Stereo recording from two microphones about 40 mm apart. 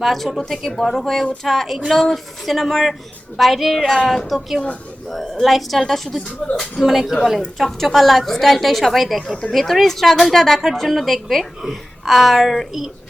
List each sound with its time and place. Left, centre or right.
0.0 s a woman's voice: centre